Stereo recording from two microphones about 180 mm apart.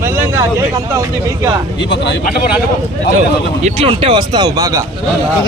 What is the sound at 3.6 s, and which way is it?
Speech, 35° right (ahead or behind).